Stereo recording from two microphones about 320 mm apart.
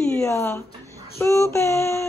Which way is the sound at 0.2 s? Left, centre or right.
Centre.